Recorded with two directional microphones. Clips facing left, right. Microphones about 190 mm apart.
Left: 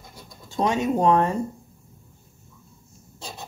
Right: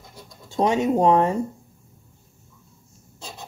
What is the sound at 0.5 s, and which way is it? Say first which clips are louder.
Speech: right 3 dB; 20° right (ahead or behind).